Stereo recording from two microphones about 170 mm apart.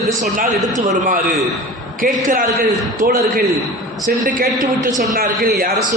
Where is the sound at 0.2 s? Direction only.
45° right (ahead or behind).